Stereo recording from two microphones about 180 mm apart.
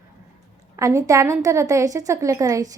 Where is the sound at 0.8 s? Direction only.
15° right (ahead or behind).